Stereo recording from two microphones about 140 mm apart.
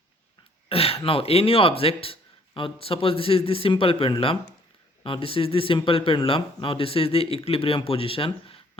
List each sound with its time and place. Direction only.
0.7 s speech: 45° left (ahead or behind)